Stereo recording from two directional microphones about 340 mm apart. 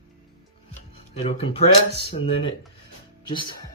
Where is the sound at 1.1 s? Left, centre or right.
Centre.